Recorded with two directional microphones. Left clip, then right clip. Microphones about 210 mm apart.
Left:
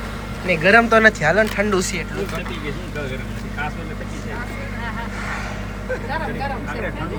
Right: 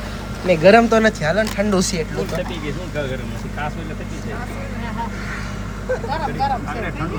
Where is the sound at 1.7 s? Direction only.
25° right (ahead or behind).